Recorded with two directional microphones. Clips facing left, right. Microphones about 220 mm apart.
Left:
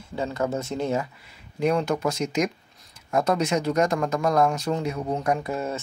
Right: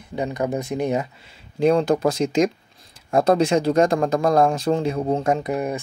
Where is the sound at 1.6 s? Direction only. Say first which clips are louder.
Right 6 dB; 30° right (ahead or behind); by 5.8 s 15° right (ahead or behind).